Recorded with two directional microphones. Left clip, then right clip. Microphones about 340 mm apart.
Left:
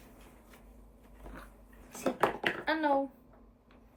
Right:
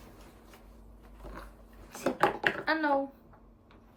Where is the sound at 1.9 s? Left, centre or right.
Centre.